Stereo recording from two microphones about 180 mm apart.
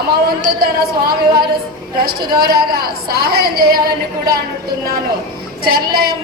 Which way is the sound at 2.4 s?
60° right (ahead or behind).